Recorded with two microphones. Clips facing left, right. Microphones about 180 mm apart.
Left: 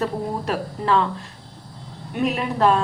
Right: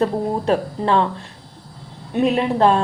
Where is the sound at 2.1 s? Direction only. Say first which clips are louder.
Right 5 dB; 30° right (ahead or behind).